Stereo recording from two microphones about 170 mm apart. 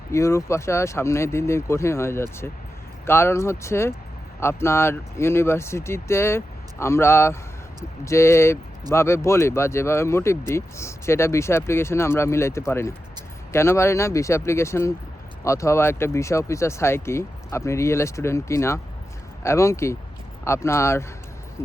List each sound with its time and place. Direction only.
0.1 s speech: 15° left (ahead or behind)